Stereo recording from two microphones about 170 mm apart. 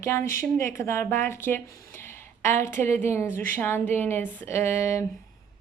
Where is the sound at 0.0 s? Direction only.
15° left (ahead or behind).